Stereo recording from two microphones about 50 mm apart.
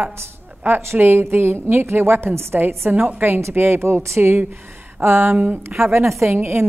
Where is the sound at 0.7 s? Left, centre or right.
Right.